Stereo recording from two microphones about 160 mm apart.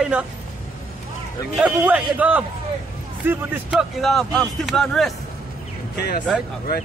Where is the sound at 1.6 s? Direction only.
10° right (ahead or behind).